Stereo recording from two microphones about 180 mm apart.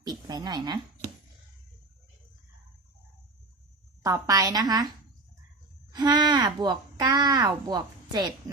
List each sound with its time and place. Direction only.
0.0 s a woman's voice: 20° right (ahead or behind)
4.0 s speech: 20° right (ahead or behind)
5.9 s speech: 25° right (ahead or behind)